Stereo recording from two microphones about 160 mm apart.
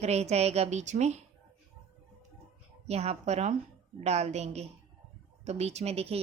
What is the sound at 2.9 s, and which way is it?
A woman's voice, 40° right (ahead or behind).